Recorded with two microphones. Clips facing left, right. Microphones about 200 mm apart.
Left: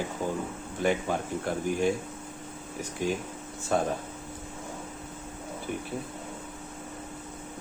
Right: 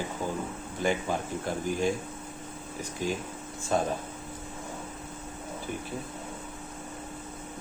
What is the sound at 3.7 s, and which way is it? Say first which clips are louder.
Speech: left 1 dB; 60° left (ahead or behind).